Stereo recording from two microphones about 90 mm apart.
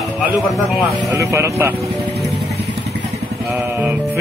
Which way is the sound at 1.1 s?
35° right (ahead or behind).